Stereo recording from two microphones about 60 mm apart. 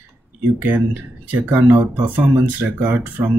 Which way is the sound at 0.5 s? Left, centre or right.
Right.